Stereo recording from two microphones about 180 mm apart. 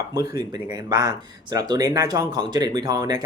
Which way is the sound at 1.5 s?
20° right (ahead or behind).